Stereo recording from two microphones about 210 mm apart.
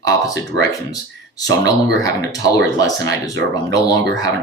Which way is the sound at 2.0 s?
15° left (ahead or behind).